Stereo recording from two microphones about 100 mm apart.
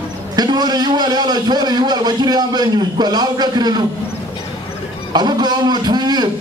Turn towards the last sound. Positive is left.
turn(degrees=-45)  # may be behind; listen again after turning